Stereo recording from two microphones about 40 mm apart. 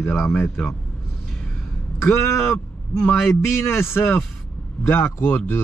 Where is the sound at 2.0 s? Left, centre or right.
Left.